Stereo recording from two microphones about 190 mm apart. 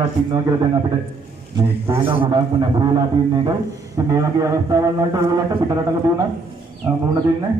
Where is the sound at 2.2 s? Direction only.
25° right (ahead or behind).